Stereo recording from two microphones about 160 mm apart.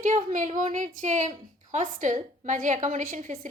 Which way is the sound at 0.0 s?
50° right (ahead or behind).